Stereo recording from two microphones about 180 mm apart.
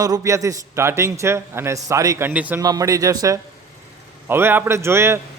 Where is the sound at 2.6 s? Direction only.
20° right (ahead or behind).